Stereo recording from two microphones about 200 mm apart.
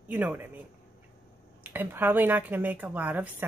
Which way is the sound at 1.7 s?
10° right (ahead or behind).